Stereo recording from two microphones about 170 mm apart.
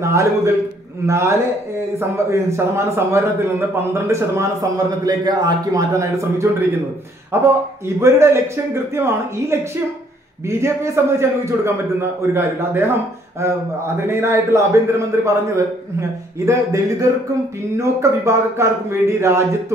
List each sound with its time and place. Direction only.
0.0 s a man's voice: 15° right (ahead or behind)
13.9 s a man's voice: 15° right (ahead or behind)